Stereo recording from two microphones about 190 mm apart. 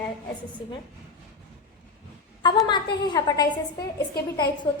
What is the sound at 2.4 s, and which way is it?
A woman's voice, 25° left (ahead or behind).